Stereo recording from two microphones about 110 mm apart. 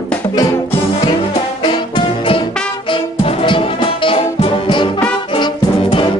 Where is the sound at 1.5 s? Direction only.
50° left (ahead or behind).